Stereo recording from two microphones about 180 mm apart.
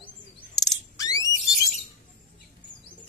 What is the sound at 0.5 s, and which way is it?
Bird, 20° left (ahead or behind).